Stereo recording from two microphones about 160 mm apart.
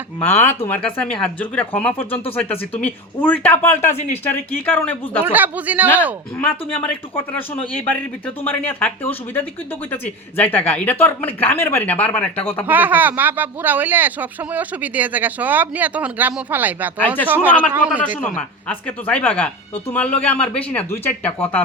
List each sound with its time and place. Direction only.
0.2 s speech: 15° left (ahead or behind)
5.2 s speech: 10° right (ahead or behind)
6.4 s speech: 10° left (ahead or behind)
12.6 s speech: 10° right (ahead or behind)
18.2 s speech: 10° left (ahead or behind)